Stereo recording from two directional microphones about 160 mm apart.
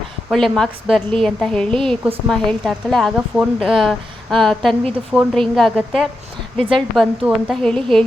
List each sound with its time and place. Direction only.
0.3 s speech: 5° left (ahead or behind)